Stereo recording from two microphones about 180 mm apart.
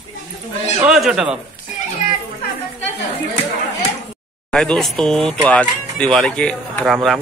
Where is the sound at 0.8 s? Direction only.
5° right (ahead or behind).